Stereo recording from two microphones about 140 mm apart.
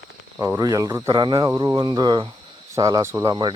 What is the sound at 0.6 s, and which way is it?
Speech, 25° right (ahead or behind).